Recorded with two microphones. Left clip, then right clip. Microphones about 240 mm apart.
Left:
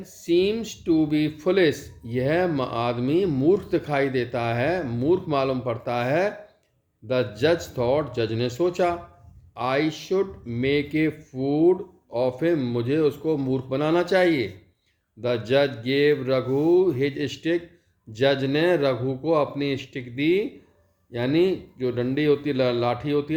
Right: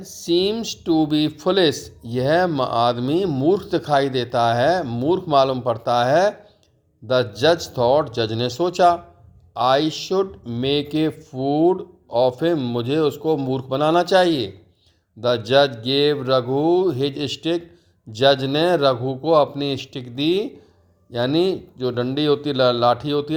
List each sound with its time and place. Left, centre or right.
0.3 s speech: right